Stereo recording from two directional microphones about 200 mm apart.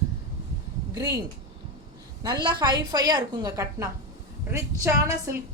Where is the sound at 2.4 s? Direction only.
20° right (ahead or behind).